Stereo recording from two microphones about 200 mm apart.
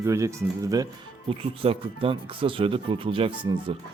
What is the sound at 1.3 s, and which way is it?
A man's voice, 30° right (ahead or behind).